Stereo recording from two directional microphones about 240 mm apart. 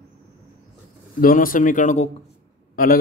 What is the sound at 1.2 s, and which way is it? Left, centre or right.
Speech, left.